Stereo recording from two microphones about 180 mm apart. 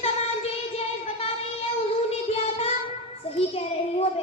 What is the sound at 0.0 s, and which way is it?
Child singing, 35° left (ahead or behind).